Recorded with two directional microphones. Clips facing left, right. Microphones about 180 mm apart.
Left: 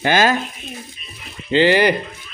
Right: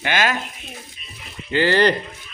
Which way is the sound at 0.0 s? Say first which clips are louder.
Left 6 dB; 35° left (ahead or behind).